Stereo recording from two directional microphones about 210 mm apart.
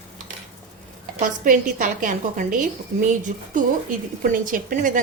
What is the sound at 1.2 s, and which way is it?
A woman's voice, 40° right (ahead or behind).